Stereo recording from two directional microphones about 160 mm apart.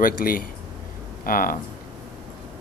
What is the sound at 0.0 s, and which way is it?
Speech, 65° left (ahead or behind).